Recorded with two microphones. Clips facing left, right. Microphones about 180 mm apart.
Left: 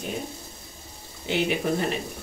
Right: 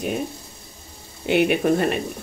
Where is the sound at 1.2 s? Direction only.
60° right (ahead or behind).